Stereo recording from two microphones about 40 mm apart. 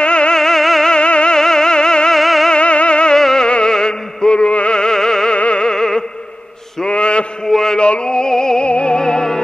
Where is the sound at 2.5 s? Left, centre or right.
Left.